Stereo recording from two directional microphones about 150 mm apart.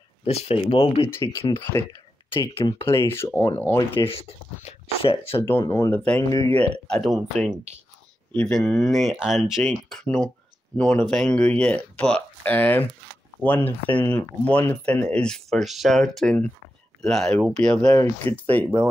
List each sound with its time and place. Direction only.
0.2 s speech: 40° left (ahead or behind)
1.0 s speech: 20° left (ahead or behind)
2.3 s speech: 35° left (ahead or behind)
2.8 s speech: 15° left (ahead or behind)
4.1 s speech: 45° left (ahead or behind)
5.4 s speech: 15° left (ahead or behind)